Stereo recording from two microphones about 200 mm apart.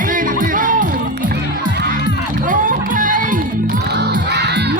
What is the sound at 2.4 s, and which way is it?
Music, 40° right (ahead or behind).